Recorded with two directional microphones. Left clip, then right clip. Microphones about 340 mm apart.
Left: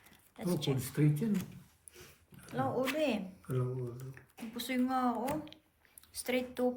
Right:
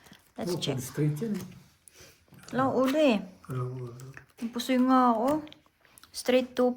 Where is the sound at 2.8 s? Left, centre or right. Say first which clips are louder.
Right 10 dB; centre.